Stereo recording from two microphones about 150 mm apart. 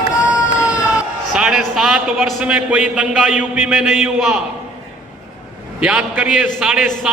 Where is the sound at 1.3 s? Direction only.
5° right (ahead or behind).